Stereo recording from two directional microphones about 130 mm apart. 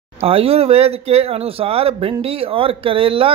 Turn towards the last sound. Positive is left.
turn(degrees=-45)  # may be behind; listen again after turning